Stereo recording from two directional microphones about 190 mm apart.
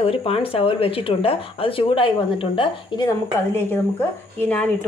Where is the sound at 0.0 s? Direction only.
30° left (ahead or behind).